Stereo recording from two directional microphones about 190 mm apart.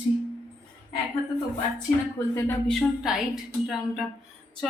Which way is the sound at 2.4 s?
15° left (ahead or behind).